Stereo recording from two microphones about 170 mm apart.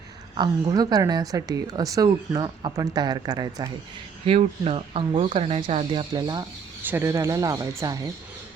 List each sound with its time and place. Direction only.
0.3 s speech: 25° right (ahead or behind)
4.3 s speech: 35° right (ahead or behind)
6.8 s speech: 15° right (ahead or behind)